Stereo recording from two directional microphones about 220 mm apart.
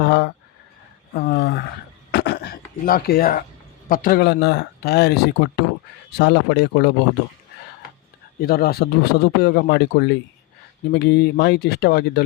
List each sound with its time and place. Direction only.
0.0 s speech: 50° left (ahead or behind)
2.1 s a sound: 50° left (ahead or behind)
3.8 s speech: 40° left (ahead or behind)
8.4 s speech: 45° left (ahead or behind)